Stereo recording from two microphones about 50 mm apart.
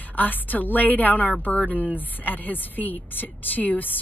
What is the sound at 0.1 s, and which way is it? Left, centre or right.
Speech, left.